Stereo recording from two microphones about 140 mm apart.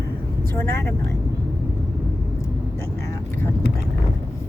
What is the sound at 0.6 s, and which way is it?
Speech, 20° left (ahead or behind).